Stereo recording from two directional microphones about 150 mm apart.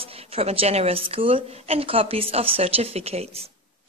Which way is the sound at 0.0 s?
40° right (ahead or behind).